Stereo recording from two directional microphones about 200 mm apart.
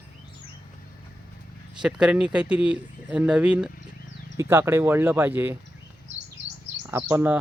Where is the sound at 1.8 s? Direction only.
5° right (ahead or behind).